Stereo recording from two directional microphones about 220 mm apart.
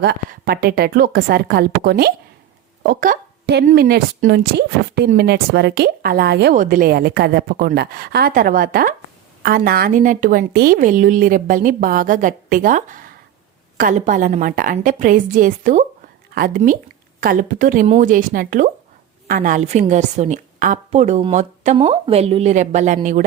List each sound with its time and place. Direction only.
0.0 s speech: 45° right (ahead or behind)
2.8 s a sound: 40° right (ahead or behind)
3.7 s a woman's voice: 45° right (ahead or behind)